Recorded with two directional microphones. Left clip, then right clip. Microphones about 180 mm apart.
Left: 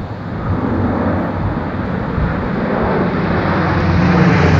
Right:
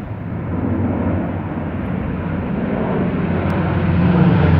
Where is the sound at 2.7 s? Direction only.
40° left (ahead or behind).